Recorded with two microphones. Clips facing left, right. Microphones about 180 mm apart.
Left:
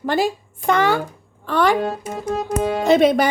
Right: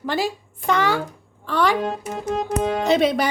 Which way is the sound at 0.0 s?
50° left (ahead or behind).